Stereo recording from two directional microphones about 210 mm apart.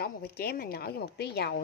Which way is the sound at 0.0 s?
50° left (ahead or behind).